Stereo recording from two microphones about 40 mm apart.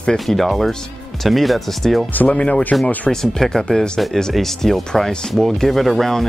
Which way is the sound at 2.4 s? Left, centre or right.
Left.